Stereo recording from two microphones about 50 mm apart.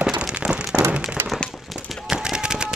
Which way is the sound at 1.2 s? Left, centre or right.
Right.